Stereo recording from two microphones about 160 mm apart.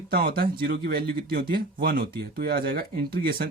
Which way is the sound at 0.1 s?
70° right (ahead or behind).